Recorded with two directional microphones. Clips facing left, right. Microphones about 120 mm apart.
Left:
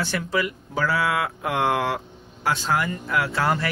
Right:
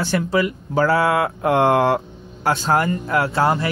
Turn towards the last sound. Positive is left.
turn(degrees=-25)  # may be behind; listen again after turning